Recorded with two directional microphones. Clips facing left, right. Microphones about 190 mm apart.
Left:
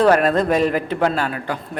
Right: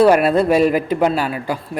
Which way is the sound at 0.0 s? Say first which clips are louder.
Right 3 dB; 10° right (ahead or behind).